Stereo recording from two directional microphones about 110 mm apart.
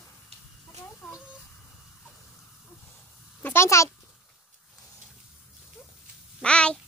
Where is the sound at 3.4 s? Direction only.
25° left (ahead or behind).